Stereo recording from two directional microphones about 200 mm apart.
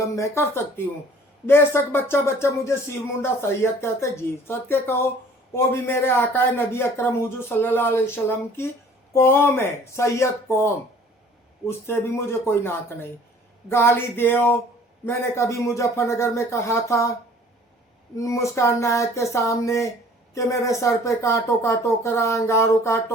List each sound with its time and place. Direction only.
0.2 s speech: 10° left (ahead or behind)
11.9 s speech: 10° left (ahead or behind)
18.2 s speech: 15° left (ahead or behind)